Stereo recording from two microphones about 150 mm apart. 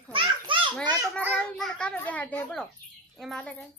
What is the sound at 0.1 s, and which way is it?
Children playing, 35° right (ahead or behind).